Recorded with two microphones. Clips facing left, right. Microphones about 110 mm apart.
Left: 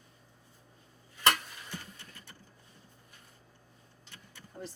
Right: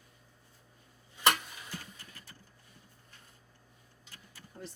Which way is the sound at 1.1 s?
15° right (ahead or behind).